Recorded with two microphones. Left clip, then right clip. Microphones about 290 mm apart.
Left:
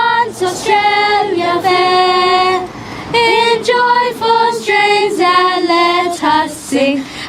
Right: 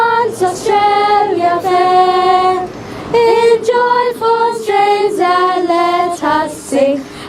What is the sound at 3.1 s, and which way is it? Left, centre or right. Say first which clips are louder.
Female singing: right 2 dB; left.